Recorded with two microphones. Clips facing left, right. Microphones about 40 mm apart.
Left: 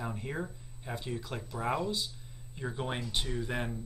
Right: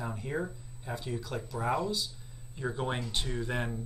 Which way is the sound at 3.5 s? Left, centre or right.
Centre.